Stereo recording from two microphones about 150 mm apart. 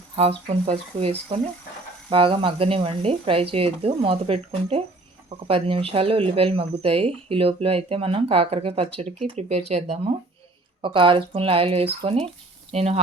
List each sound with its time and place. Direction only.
0.2 s speech: 40° right (ahead or behind)
10.8 s speech: 35° right (ahead or behind)